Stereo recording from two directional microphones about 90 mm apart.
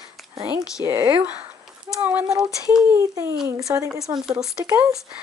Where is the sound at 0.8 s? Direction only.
35° right (ahead or behind).